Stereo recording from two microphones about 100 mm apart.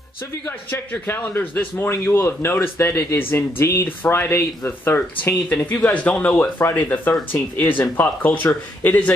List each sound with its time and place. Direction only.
0.5 s a man's voice: 20° left (ahead or behind)